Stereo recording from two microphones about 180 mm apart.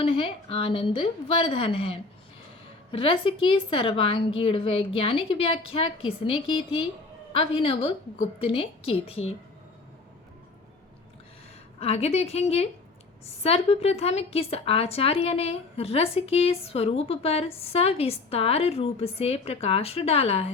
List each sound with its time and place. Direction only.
0.0 s speech: 30° left (ahead or behind)
11.8 s speech: 35° left (ahead or behind)